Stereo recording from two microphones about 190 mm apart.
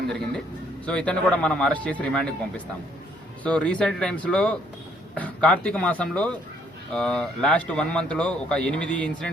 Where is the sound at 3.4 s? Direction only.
5° left (ahead or behind).